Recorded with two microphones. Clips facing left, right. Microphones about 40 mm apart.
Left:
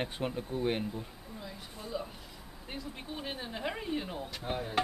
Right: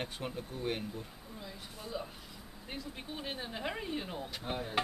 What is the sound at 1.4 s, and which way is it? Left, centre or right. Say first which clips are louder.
Speech: left 2 dB; centre.